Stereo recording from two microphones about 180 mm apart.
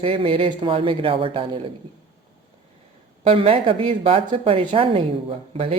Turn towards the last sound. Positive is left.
turn(degrees=-30)  # may be behind; listen again after turning